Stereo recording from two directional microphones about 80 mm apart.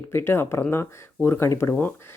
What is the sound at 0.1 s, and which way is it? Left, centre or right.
Speech, left.